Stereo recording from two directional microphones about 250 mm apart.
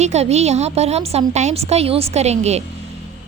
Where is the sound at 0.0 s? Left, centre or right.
Right.